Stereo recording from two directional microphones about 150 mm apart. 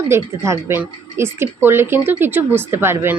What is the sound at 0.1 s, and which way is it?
Speech, 20° right (ahead or behind).